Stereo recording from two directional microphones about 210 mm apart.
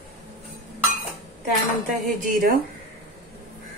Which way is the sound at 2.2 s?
45° right (ahead or behind).